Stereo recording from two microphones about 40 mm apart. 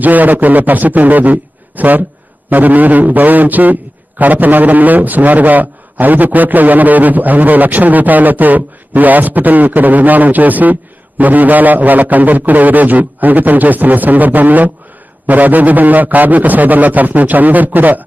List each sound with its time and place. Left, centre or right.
0.0 s a man's voice: right